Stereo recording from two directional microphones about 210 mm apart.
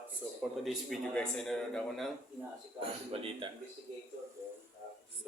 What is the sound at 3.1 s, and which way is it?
Speech, 25° right (ahead or behind).